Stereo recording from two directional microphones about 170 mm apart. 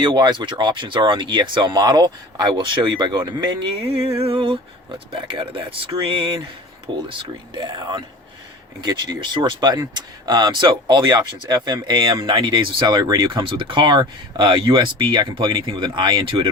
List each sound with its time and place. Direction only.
0.0 s speech: 25° right (ahead or behind)